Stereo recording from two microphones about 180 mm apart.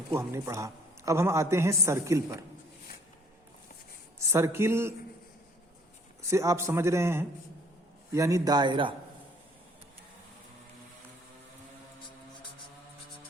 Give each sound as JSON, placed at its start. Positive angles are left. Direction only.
{"t": 0.1, "sound": "a man's voice", "side_deg": -15}
{"t": 4.2, "sound": "a man's voice", "side_deg": -15}
{"t": 6.3, "sound": "a man's voice", "side_deg": -15}